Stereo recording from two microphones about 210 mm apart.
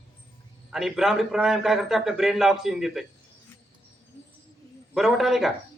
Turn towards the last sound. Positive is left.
turn(degrees=0)  # may be behind; listen again after turning